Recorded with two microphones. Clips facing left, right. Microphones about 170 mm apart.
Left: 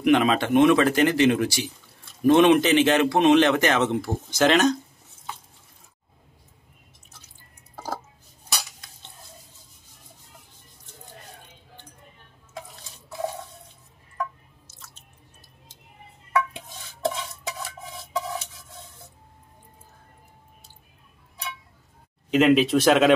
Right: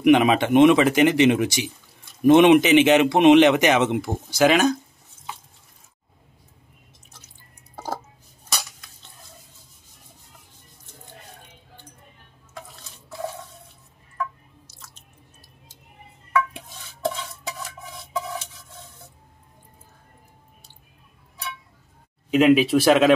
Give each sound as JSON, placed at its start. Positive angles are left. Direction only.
{"t": 0.0, "sound": "speech", "side_deg": -15}
{"t": 22.3, "sound": "speech", "side_deg": -5}